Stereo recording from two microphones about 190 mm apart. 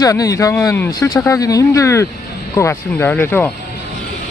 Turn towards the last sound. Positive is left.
turn(degrees=10)  # may be behind; listen again after turning